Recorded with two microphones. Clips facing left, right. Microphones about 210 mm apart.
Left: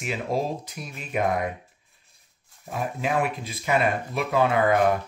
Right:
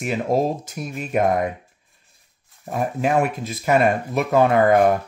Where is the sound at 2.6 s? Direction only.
45° right (ahead or behind).